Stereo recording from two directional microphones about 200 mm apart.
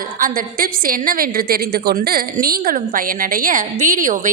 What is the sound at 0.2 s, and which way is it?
A woman's voice, 45° right (ahead or behind).